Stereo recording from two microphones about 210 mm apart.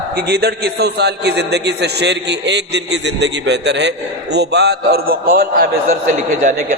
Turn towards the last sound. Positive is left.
turn(degrees=-40)  # may be behind; listen again after turning